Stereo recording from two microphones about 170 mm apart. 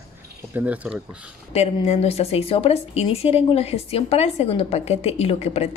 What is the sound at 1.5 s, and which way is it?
A woman's voice, 40° left (ahead or behind).